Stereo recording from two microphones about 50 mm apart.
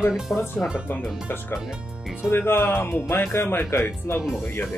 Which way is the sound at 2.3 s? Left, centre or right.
Left.